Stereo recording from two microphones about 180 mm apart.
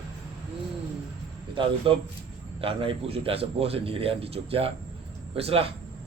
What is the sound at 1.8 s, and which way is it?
A man's voice, 30° right (ahead or behind).